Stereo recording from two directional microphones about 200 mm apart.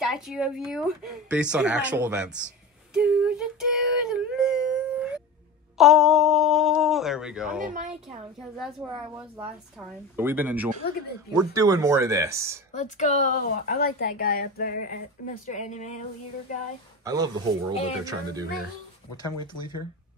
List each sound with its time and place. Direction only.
0.0 s a woman's voice: centre (ahead or behind)
2.9 s a sound: 5° right (ahead or behind)
5.8 s a woman's voice: centre (ahead or behind)
7.6 s speech: 40° right (ahead or behind)
8.5 s a woman's voice: 5° right (ahead or behind)
12.7 s speech: 35° left (ahead or behind)
17.0 s speech: 20° right (ahead or behind)